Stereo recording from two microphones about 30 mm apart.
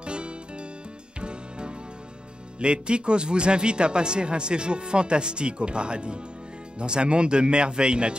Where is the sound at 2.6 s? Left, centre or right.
Right.